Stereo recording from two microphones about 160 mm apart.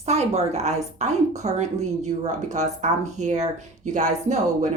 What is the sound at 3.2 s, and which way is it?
A woman's voice, 50° right (ahead or behind).